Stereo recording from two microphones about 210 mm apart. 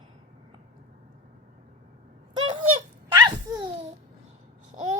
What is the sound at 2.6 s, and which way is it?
Laughter, 20° right (ahead or behind).